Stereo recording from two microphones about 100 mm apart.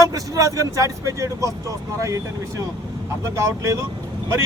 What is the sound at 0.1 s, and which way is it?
Speech, 35° right (ahead or behind).